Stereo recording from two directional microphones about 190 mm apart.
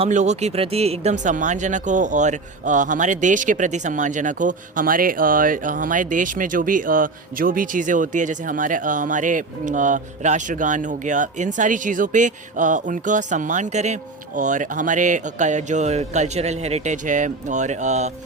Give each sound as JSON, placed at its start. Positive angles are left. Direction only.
{"t": 0.0, "sound": "speech", "side_deg": -40}